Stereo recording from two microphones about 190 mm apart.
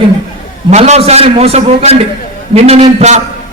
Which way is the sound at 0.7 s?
35° right (ahead or behind).